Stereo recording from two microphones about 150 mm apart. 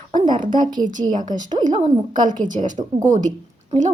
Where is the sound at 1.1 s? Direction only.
60° right (ahead or behind).